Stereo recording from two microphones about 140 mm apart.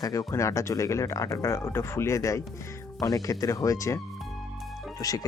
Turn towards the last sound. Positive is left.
turn(degrees=25)  # may be behind; listen again after turning